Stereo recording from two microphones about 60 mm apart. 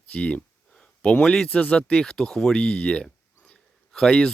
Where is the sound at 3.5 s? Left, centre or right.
Centre.